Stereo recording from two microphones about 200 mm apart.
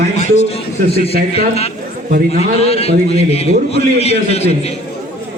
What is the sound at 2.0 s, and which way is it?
Speech, 45° right (ahead or behind).